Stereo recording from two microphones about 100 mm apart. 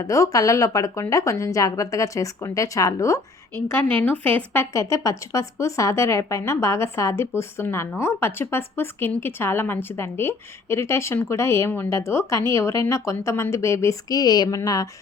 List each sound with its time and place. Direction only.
0.0 s a woman's voice: 35° left (ahead or behind)
3.7 s speech: 20° left (ahead or behind)
4.7 s a woman's voice: 30° left (ahead or behind)